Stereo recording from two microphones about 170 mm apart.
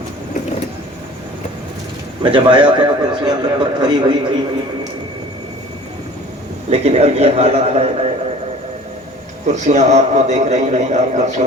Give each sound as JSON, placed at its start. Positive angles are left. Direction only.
{"t": 2.2, "sound": "a man's voice", "side_deg": -30}
{"t": 6.7, "sound": "a man's voice", "side_deg": -35}
{"t": 9.6, "sound": "a man's voice", "side_deg": -45}